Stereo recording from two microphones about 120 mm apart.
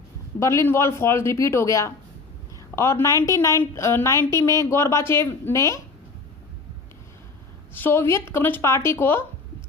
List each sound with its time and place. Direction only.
0.3 s a woman's voice: 25° left (ahead or behind)
7.7 s a woman's voice: 15° left (ahead or behind)